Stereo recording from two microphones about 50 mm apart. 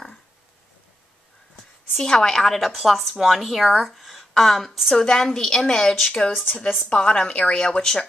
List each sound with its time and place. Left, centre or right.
2.0 s a woman's voice: centre
4.9 s a woman's voice: centre
6.3 s a woman's voice: left